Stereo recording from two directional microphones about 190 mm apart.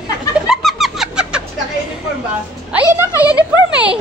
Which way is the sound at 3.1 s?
20° left (ahead or behind).